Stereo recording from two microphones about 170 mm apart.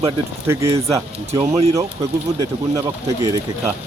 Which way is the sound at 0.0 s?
15° right (ahead or behind).